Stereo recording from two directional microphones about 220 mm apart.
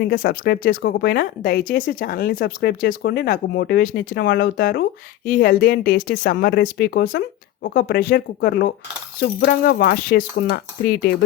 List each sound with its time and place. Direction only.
0.0 s speech: 40° left (ahead or behind)